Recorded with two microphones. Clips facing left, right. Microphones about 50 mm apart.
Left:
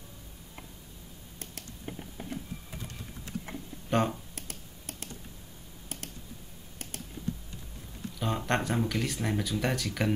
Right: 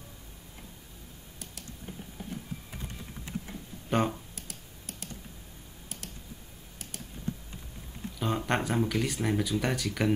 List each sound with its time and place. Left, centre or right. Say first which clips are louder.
1.9 s a sound: left 2 dB; left
3.5 s computer keyboard: left 2 dB; left
3.9 s speech: even; centre
4.4 s computer keyboard: left 2 dB; left
8.2 s speech: even; centre